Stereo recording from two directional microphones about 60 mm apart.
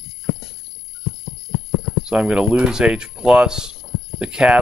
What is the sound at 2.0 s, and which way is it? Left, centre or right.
Speech, centre.